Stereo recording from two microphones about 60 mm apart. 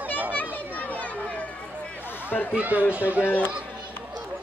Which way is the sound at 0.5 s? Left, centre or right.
Left.